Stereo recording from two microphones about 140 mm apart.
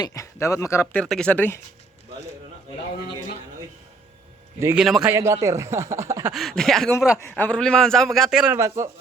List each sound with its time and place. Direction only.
0.0 s speech: 20° left (ahead or behind)
0.9 s speech: 5° left (ahead or behind)
4.8 s a man's voice: centre (ahead or behind)
5.0 s speech: 20° right (ahead or behind)
6.3 s a man's voice: centre (ahead or behind)
8.5 s speech: 20° right (ahead or behind)